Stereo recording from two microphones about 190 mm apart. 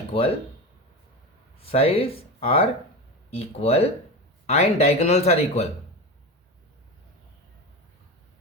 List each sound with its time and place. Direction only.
1.6 s speech: 30° left (ahead or behind)